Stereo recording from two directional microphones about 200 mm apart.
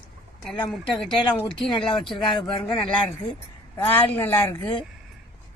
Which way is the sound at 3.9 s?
10° left (ahead or behind).